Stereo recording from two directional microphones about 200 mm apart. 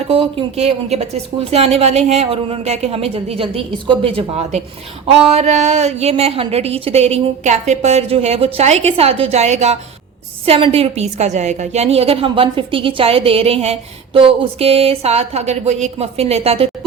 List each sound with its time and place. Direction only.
0.1 s a woman's voice: 30° right (ahead or behind)